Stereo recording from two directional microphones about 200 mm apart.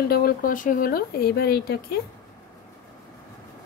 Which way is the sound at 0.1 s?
50° left (ahead or behind).